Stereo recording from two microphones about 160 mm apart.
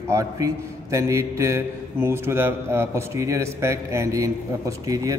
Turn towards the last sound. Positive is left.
turn(degrees=-20)  # may be behind; listen again after turning